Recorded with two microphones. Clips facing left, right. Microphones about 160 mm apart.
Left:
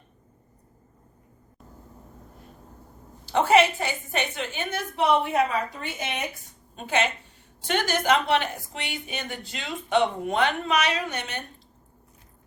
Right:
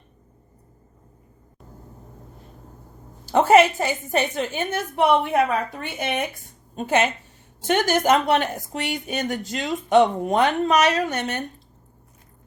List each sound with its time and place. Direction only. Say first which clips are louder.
3.2 s a woman's voice: right 4 dB; 45° right (ahead or behind)
6.7 s a woman's voice: right 5 dB; 45° right (ahead or behind)